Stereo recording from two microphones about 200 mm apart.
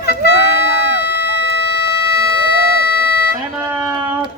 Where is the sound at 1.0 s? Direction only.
55° left (ahead or behind).